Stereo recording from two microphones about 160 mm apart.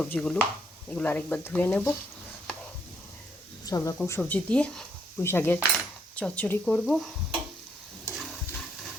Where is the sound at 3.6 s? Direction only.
20° left (ahead or behind); by 7.1 s centre (ahead or behind).